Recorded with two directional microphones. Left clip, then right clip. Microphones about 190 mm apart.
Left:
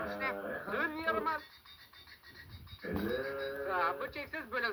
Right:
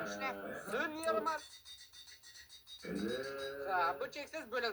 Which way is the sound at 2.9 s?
55° right (ahead or behind).